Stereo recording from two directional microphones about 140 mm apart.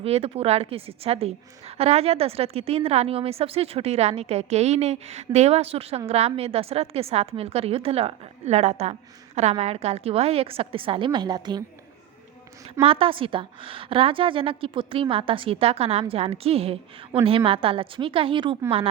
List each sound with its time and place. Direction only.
0.0 s a woman's voice: 45° right (ahead or behind); by 11.6 s 30° right (ahead or behind)
12.8 s a woman's voice: 40° right (ahead or behind)